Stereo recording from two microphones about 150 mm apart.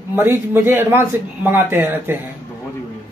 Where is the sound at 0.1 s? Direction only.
15° right (ahead or behind).